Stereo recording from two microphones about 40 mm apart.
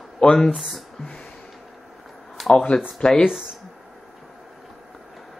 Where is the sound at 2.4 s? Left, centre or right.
Centre.